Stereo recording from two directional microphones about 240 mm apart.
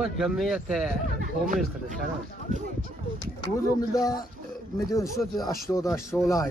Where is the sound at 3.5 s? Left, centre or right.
Centre.